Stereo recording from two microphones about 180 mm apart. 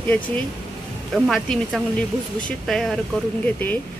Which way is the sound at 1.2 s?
Centre (ahead or behind).